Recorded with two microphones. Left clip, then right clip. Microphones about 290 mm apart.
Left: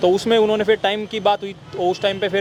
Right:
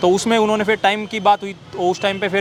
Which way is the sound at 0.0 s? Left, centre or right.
Right.